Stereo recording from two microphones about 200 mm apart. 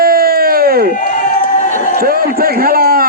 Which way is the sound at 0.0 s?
50° right (ahead or behind).